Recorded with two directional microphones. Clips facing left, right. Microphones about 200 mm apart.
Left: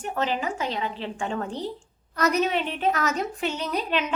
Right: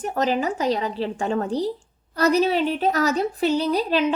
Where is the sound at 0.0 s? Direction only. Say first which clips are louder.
Right 5 dB; 40° right (ahead or behind).